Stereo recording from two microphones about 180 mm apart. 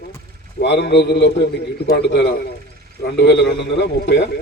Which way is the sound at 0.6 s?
70° left (ahead or behind).